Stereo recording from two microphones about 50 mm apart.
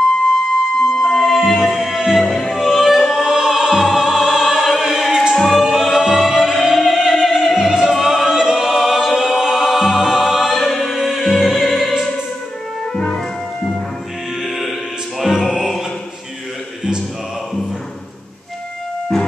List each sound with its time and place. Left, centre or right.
1.0 s music: centre
8.5 s a capella: centre
12.9 s music: centre
15.1 s music: centre